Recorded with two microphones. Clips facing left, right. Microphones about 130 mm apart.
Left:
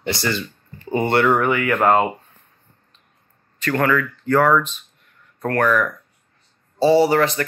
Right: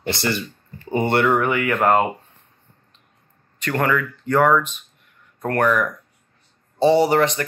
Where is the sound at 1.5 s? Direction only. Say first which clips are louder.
Left 1 dB; 25° right (ahead or behind).